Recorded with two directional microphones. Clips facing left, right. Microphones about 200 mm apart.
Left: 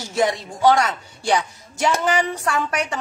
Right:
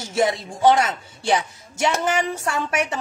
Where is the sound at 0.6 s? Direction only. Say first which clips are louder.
Even; 25° right (ahead or behind).